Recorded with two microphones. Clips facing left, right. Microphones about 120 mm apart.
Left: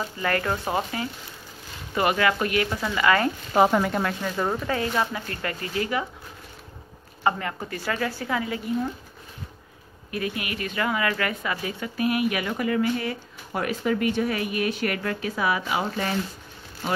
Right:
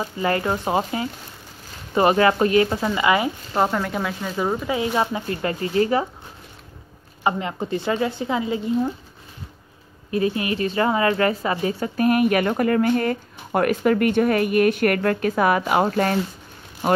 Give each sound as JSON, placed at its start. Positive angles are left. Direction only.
{"t": 0.0, "sound": "speech", "side_deg": -20}
{"t": 3.5, "sound": "speech", "side_deg": 5}
{"t": 7.2, "sound": "speech", "side_deg": -20}
{"t": 10.1, "sound": "a woman's voice", "side_deg": -30}